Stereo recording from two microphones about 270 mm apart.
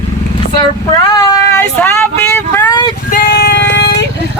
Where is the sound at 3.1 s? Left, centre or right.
Left.